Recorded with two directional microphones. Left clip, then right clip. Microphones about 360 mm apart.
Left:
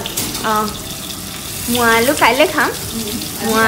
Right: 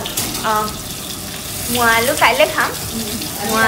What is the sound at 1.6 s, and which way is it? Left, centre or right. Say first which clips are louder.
Speech: left 1 dB; centre.